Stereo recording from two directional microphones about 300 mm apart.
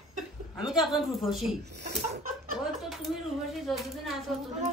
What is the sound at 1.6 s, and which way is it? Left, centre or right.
Speech, right.